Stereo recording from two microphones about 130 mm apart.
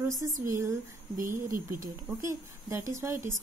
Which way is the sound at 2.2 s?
20° right (ahead or behind).